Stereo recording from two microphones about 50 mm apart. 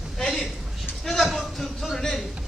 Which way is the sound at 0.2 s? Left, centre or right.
Centre.